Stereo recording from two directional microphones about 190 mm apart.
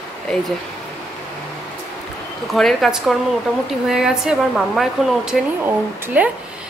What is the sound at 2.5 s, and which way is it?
A woman's voice, centre (ahead or behind).